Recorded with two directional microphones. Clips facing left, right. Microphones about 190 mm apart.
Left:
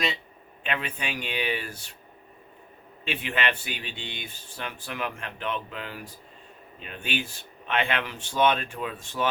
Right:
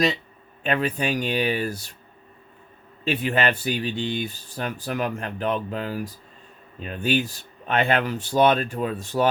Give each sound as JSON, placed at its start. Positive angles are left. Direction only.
{"t": 0.6, "sound": "speech", "side_deg": -40}
{"t": 3.0, "sound": "speech", "side_deg": -40}